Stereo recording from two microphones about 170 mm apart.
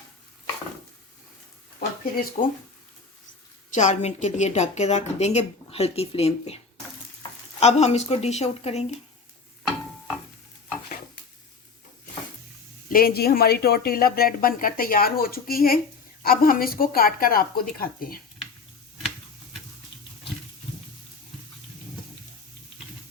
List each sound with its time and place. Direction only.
2.4 s speech: 55° left (ahead or behind)
3.7 s a woman's voice: 45° left (ahead or behind)
7.6 s a woman's voice: 40° left (ahead or behind)
12.9 s speech: 60° left (ahead or behind)